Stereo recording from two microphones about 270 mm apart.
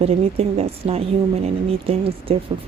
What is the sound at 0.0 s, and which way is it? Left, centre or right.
Speech, right.